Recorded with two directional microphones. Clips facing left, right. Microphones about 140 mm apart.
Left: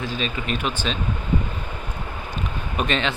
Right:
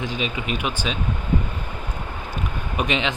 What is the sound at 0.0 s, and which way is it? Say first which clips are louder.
Speech: right 1 dB; 15° right (ahead or behind).